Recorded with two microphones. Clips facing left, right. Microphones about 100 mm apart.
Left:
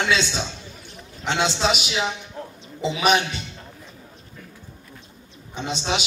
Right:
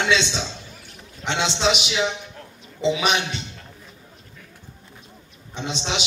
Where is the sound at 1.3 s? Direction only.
45° left (ahead or behind).